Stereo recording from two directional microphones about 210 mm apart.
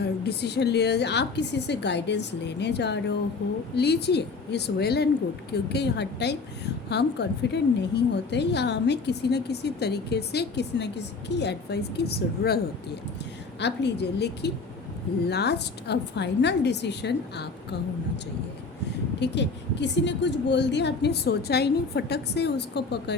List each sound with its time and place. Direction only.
0.0 s a woman's voice: 50° left (ahead or behind)
13.6 s a woman's voice: 55° left (ahead or behind)
19.2 s a woman's voice: 55° left (ahead or behind)